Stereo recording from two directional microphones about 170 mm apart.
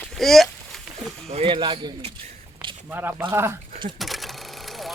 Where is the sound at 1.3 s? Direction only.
30° right (ahead or behind).